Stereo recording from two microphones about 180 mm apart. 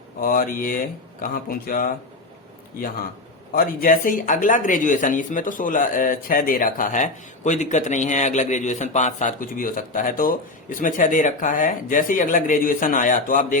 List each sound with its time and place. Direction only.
0.2 s speech: 50° left (ahead or behind)
3.5 s speech: 55° left (ahead or behind)